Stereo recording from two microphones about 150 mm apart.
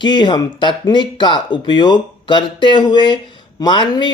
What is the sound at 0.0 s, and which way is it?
Speech, 30° left (ahead or behind).